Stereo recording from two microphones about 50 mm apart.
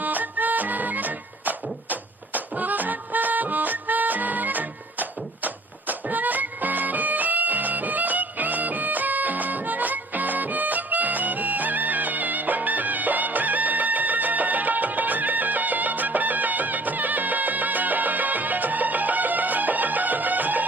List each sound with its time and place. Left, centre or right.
0.0 s music: right